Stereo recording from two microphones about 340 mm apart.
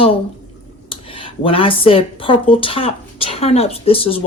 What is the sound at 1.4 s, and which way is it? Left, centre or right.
Speech, centre.